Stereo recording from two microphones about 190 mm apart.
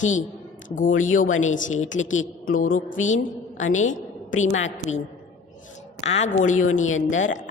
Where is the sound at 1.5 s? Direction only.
45° left (ahead or behind).